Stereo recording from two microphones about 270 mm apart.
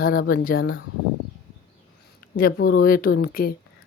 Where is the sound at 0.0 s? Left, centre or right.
Left.